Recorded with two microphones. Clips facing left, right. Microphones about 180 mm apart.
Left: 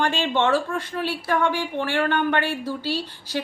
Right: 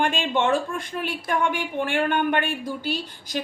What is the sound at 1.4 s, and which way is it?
A woman's voice, 15° right (ahead or behind).